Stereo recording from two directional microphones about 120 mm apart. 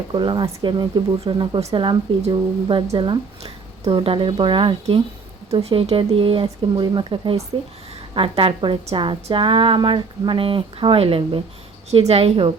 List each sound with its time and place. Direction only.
0.1 s speech: 40° right (ahead or behind)